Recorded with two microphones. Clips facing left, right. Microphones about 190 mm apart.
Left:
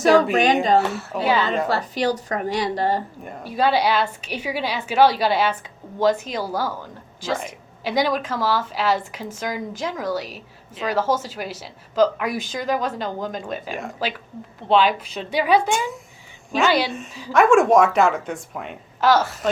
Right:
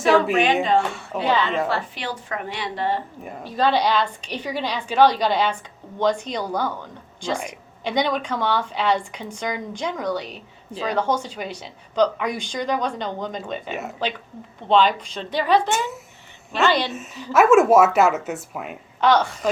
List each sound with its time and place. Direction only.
0.0 s a woman's voice: 40° left (ahead or behind)
0.8 s speech: 5° left (ahead or behind)
1.6 s a woman's voice: 40° left (ahead or behind)
3.4 s a woman's voice: 10° left (ahead or behind)
17.3 s a woman's voice: 5° right (ahead or behind)